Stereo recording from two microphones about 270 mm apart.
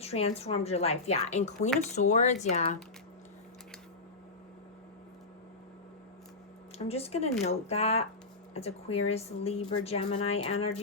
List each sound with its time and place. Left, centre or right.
0.0 s speech: left
6.7 s speech: left